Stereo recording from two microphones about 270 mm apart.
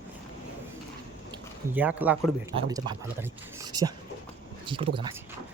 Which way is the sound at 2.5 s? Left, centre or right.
Centre.